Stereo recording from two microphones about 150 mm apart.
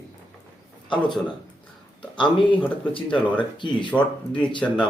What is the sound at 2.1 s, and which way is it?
Speech, 30° left (ahead or behind).